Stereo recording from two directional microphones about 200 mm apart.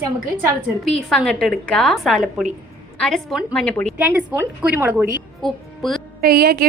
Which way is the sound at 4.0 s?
10° right (ahead or behind).